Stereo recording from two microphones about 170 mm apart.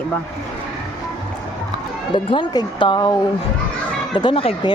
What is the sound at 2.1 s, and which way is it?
Speech, 25° left (ahead or behind).